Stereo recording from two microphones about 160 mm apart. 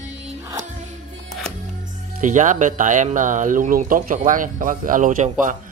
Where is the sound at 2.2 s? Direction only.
50° right (ahead or behind).